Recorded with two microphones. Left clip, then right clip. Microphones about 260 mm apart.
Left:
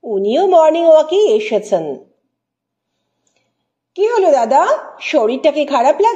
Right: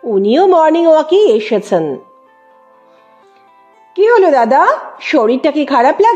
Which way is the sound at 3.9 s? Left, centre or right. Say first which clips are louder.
Right 4 dB; right.